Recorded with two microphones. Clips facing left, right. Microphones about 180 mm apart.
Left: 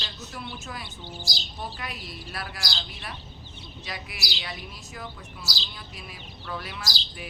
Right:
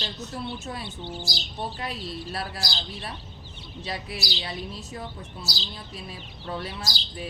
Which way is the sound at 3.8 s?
30° right (ahead or behind).